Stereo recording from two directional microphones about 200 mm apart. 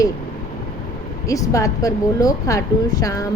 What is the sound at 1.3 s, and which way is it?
Speech, 15° left (ahead or behind).